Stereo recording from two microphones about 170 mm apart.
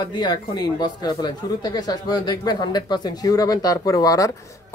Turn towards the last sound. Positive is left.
turn(degrees=20)  # may be behind; listen again after turning